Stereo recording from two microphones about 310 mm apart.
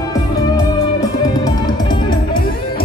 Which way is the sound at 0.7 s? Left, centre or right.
Centre.